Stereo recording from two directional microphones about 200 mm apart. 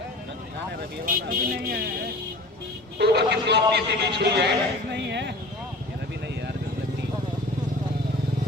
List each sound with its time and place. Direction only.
1.0 s speech: 45° right (ahead or behind); by 5.3 s 60° right (ahead or behind)